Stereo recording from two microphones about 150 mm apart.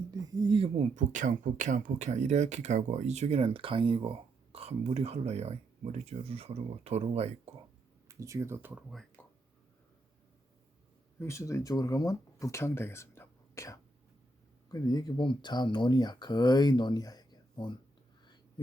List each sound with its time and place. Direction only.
0.3 s speech: 35° right (ahead or behind)
0.9 s speech: 55° right (ahead or behind)
8.0 s speech: 20° right (ahead or behind)
9.2 s a sound: 15° left (ahead or behind)
11.2 s speech: 20° left (ahead or behind)